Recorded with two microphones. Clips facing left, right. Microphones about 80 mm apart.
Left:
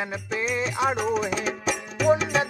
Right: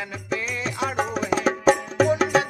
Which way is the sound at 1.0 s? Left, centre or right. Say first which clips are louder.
Right 1 dB; right.